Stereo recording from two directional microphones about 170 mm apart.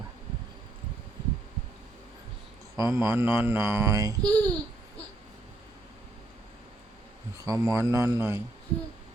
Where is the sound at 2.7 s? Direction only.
15° right (ahead or behind).